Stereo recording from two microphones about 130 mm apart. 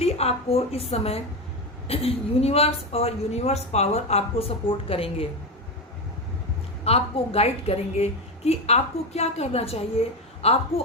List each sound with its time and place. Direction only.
0.0 s a woman's voice: 50° left (ahead or behind)
6.8 s a woman's voice: 50° left (ahead or behind)